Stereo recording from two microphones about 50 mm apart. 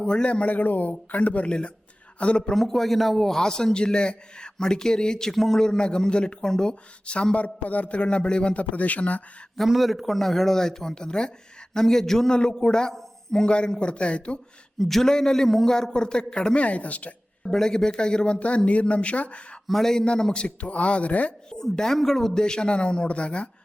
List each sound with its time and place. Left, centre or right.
0.0 s a man's voice: centre
2.5 s a man's voice: centre; by 9.2 s left
9.6 s a man's voice: centre; by 14.3 s left
14.8 s a man's voice: centre
16.6 s a man's voice: left
17.5 s a man's voice: centre; by 19.4 s left
19.6 s a man's voice: centre; by 21.3 s left
21.5 s a man's voice: centre